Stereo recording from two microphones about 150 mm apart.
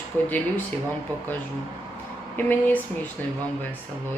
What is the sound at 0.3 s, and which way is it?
Speech, 10° left (ahead or behind).